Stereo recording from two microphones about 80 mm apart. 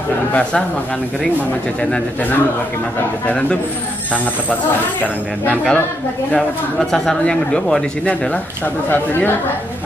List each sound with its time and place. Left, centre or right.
0.3 s a man's voice: centre
3.3 s a man's voice: centre
5.0 s a man's voice: centre
6.3 s a man's voice: centre; by 9.3 s left